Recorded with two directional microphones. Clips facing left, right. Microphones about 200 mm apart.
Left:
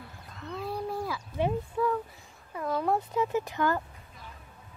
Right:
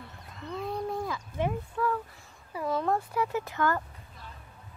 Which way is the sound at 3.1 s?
20° left (ahead or behind).